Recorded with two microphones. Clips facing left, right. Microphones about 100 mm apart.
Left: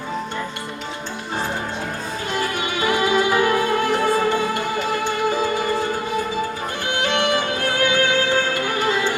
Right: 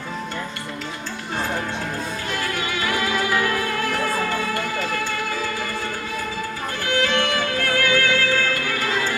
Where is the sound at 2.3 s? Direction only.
20° left (ahead or behind).